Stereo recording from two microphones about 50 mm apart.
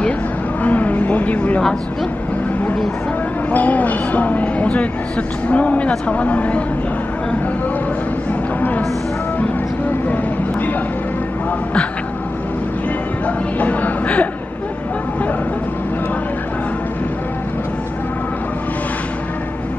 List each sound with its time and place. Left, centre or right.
0.7 s vehicle: left
3.5 s speech: left
8.5 s music: left
10.0 s vehicle: left
13.6 s speech: left